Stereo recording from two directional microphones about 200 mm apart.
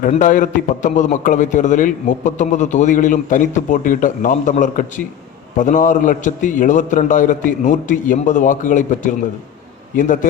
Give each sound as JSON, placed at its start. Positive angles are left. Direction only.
{"t": 0.0, "sound": "a man's voice", "side_deg": 40}